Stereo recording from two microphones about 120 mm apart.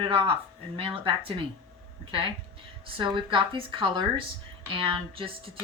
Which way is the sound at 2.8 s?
50° right (ahead or behind).